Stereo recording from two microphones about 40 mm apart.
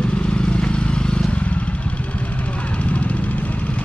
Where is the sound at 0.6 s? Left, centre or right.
Left.